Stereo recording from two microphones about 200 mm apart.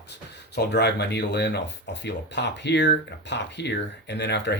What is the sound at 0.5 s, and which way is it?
Speech, 55° left (ahead or behind).